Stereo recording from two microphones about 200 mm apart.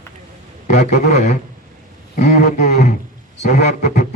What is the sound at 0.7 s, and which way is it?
A man's voice, 35° left (ahead or behind).